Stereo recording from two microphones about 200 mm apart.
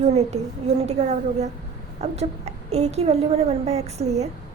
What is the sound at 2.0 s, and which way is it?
A woman's voice, 35° right (ahead or behind).